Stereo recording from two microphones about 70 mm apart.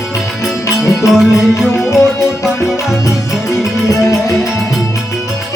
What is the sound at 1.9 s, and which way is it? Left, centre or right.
Music, left.